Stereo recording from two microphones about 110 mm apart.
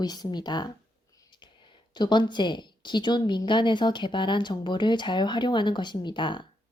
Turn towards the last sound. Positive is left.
turn(degrees=45)  # may be behind; listen again after turning